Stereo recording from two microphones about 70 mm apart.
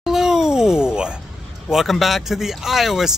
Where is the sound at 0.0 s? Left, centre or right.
Centre.